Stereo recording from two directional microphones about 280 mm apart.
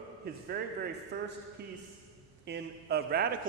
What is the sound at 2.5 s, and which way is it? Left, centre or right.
Speech, right.